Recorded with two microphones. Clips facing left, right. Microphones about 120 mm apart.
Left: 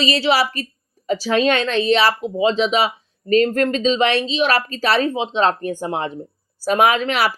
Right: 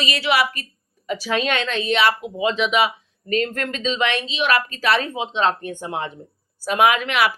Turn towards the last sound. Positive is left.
turn(degrees=35)  # may be behind; listen again after turning